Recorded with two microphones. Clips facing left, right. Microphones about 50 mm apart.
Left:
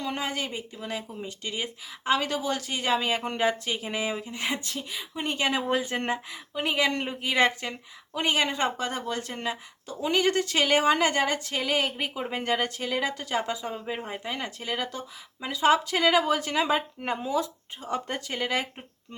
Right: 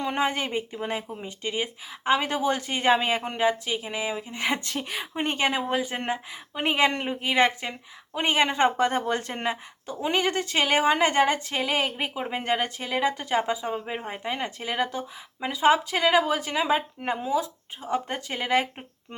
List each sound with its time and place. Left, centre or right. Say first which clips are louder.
0.0 s speech: right 5 dB; right
1.0 s speech: right 3 dB; right
3.2 s speech: right 2 dB; centre
4.3 s speech: right 3 dB; right
4.6 s speech: right 4 dB; right
5.1 s speech: right 3 dB; right
5.6 s speech: even; centre
6.3 s speech: right 2 dB; right
8.2 s speech: right 4 dB; right
11.1 s speech: right 4 dB; right